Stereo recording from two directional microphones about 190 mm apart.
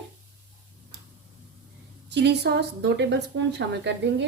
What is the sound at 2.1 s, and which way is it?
A woman's voice, 65° right (ahead or behind).